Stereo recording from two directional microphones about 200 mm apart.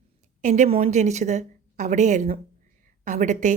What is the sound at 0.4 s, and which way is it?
A woman's voice, 35° right (ahead or behind).